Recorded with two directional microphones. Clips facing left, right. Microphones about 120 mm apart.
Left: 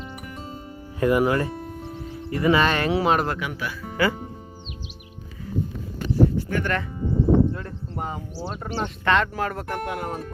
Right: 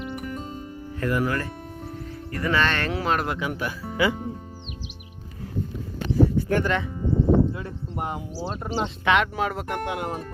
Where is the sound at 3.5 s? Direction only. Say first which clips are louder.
Right 2 dB; 45° right (ahead or behind).